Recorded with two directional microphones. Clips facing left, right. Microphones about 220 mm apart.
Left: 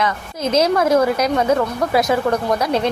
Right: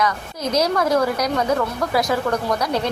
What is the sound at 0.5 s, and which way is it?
Speech, 25° left (ahead or behind).